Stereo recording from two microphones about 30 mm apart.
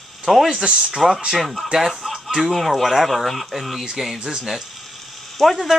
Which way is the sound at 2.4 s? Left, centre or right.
Centre.